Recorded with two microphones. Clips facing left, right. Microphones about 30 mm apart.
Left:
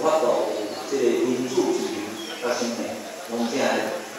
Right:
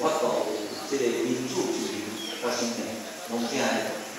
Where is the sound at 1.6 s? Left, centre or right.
Left.